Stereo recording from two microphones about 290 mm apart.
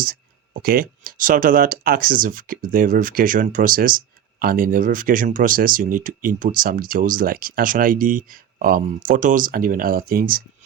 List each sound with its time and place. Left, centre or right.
0.0 s speech: right